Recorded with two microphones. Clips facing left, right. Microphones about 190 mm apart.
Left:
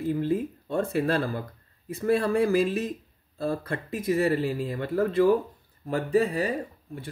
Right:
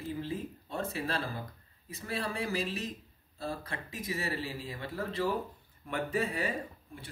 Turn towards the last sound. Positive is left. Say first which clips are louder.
# left 8 dB
turn(degrees=40)  # may be behind; listen again after turning